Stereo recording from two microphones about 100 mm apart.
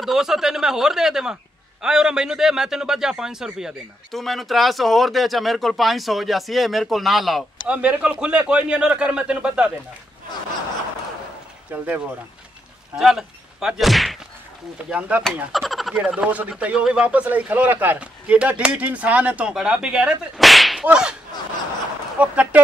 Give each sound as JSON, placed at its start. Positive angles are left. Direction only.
{"t": 0.0, "sound": "a man's voice", "side_deg": -5}
{"t": 7.7, "sound": "speech", "side_deg": -15}
{"t": 11.7, "sound": "speech", "side_deg": -15}
{"t": 12.9, "sound": "a sound", "side_deg": -5}
{"t": 14.9, "sound": "speech", "side_deg": -15}
{"t": 15.5, "sound": "speech", "side_deg": 0}
{"t": 22.2, "sound": "speech", "side_deg": -15}